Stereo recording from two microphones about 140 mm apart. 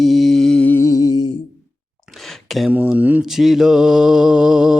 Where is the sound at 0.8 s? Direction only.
25° left (ahead or behind).